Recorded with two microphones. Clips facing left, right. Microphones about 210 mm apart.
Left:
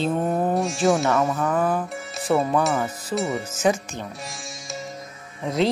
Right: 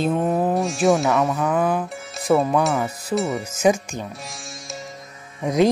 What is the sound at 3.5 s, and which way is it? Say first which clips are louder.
Speech: right 6 dB; 15° right (ahead or behind).